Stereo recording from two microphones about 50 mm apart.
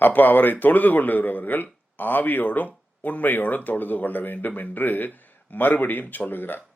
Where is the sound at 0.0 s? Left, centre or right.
Left.